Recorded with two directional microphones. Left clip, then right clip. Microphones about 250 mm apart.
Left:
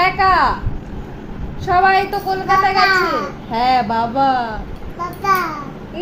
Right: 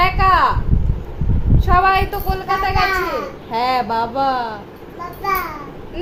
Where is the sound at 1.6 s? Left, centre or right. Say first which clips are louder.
Left 1 dB; centre.